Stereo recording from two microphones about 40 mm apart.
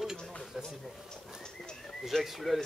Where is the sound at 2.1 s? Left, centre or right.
Centre.